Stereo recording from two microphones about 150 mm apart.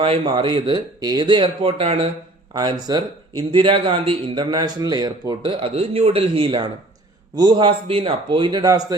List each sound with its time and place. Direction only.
0.0 s speech: 35° right (ahead or behind)
2.5 s speech: 30° right (ahead or behind)